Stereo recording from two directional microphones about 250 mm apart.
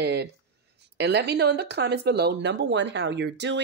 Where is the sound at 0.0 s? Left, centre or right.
Right.